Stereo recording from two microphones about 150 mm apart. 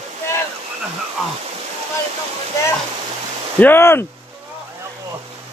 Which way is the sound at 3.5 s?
15° left (ahead or behind).